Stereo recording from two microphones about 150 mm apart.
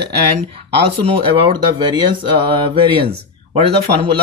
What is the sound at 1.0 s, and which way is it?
Speech, 35° right (ahead or behind).